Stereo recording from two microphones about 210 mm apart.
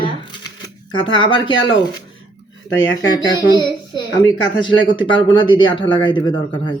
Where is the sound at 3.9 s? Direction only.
20° left (ahead or behind).